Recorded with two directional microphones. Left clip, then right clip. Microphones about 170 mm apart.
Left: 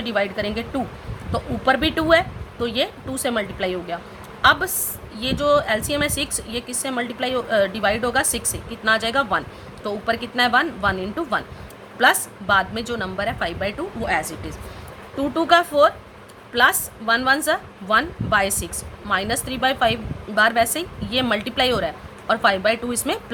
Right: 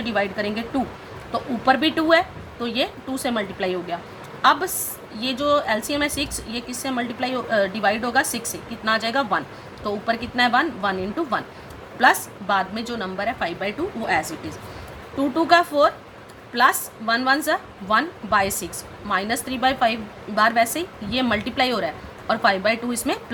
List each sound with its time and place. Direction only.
0.0 s a woman's voice: 20° left (ahead or behind)